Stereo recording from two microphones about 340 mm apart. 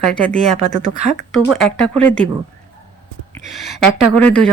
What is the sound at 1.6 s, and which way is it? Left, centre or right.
Speech, centre.